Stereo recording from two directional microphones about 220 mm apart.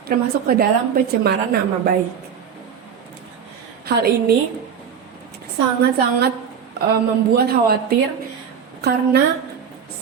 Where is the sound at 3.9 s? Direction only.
45° right (ahead or behind).